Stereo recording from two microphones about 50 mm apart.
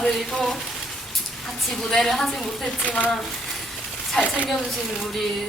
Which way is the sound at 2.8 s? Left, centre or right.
Left.